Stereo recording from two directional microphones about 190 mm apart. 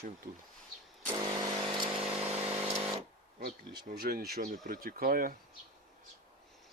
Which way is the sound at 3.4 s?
55° right (ahead or behind).